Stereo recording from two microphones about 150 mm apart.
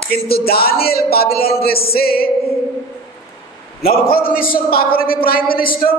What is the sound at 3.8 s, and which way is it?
A man's voice, 80° left.